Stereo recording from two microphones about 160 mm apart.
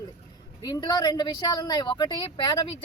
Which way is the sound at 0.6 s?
25° left (ahead or behind).